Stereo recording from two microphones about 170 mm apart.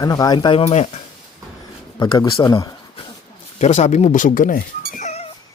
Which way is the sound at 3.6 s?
45° left (ahead or behind).